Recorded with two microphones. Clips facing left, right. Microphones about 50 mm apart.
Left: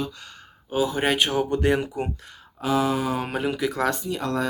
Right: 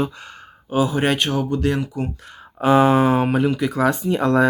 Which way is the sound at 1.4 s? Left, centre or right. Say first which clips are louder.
Right 1 dB; left.